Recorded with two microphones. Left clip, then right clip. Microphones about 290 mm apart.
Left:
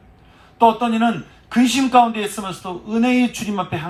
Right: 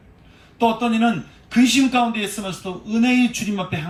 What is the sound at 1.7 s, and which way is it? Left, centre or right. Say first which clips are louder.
A man's voice: left 4 dB; centre.